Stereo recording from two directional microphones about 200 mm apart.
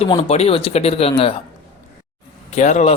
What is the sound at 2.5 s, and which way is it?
Speech, 35° left (ahead or behind).